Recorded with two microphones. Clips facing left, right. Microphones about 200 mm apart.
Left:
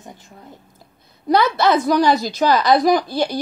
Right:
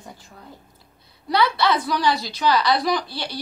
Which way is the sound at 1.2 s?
45° left (ahead or behind).